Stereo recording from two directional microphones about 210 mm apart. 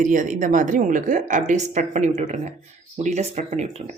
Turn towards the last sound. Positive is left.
turn(degrees=-30)  # may be behind; listen again after turning